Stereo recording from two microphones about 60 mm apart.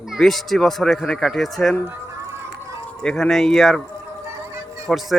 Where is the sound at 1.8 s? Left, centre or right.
Right.